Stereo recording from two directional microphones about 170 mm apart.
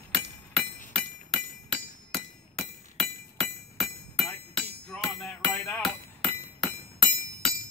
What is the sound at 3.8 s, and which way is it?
Hammer, centre (ahead or behind).